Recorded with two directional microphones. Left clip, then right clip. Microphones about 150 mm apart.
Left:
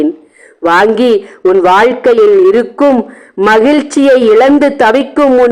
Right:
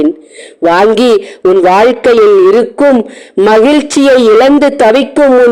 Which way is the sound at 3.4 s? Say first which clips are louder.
Right 1 dB; 30° right (ahead or behind).